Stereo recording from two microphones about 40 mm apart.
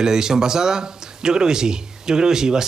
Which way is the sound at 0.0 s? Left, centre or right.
Centre.